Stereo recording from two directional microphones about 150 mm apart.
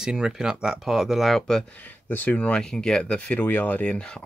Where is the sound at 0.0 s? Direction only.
5° right (ahead or behind).